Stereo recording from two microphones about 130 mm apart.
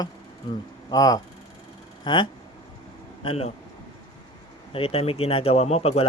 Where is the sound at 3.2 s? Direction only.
50° left (ahead or behind).